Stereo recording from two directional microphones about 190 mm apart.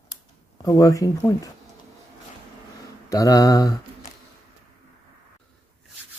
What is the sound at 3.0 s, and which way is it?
Speech, 20° left (ahead or behind).